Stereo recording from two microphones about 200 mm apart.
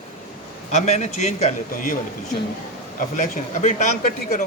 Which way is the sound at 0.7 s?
35° left (ahead or behind).